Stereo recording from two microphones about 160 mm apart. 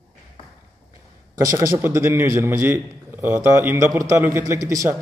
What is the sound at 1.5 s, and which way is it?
A man's voice, 15° right (ahead or behind).